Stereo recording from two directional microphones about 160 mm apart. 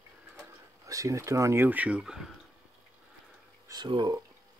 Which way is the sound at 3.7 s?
30° right (ahead or behind).